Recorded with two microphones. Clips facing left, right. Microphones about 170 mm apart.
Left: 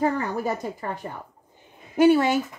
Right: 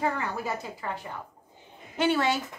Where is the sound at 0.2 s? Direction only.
45° left (ahead or behind).